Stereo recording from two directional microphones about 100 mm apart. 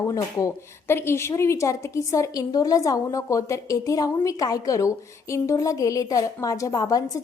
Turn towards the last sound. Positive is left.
turn(degrees=35)  # may be behind; listen again after turning